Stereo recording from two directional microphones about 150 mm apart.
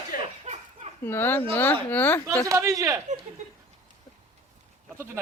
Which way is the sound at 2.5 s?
20° right (ahead or behind).